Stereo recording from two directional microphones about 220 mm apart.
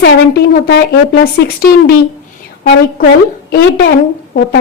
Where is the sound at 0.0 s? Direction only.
50° left (ahead or behind).